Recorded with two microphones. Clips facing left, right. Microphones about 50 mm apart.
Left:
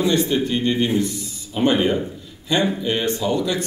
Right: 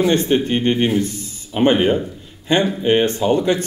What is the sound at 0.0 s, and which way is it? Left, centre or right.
A man's voice, right.